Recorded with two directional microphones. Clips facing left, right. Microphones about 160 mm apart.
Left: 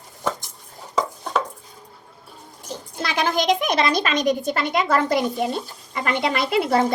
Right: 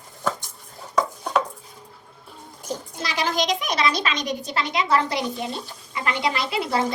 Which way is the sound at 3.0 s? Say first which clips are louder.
Left 3 dB; 55° left (ahead or behind).